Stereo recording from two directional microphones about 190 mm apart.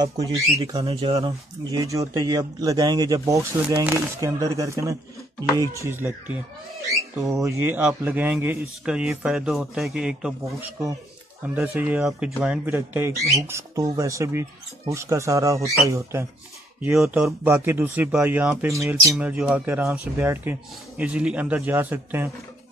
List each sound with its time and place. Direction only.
0.0 s speech: 20° right (ahead or behind)
7.4 s speech: 10° right (ahead or behind)
11.4 s speech: 10° right (ahead or behind)